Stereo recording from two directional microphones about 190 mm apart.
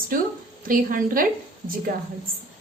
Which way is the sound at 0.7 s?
45° right (ahead or behind).